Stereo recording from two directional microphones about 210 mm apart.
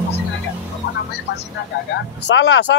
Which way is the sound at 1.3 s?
55° left (ahead or behind).